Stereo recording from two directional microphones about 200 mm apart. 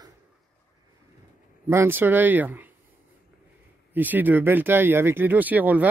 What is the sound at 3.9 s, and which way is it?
Speech, 10° right (ahead or behind).